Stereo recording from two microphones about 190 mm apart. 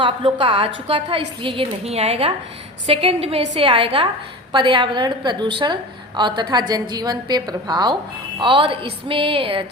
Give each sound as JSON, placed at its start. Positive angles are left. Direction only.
{"t": 0.0, "sound": "a woman's voice", "side_deg": -25}